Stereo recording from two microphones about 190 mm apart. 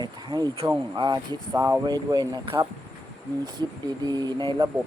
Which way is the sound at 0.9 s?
20° right (ahead or behind).